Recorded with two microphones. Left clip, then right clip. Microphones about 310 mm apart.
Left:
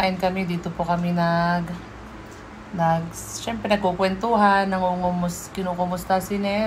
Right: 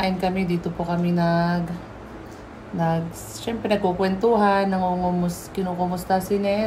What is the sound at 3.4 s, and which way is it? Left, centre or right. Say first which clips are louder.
A woman's voice: even; centre.